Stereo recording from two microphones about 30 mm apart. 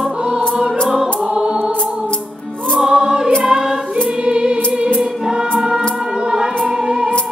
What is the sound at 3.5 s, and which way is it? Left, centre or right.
Music, centre.